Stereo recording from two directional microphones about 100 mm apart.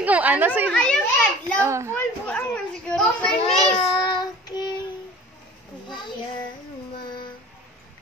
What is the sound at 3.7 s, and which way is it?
Child singing, 50° left (ahead or behind).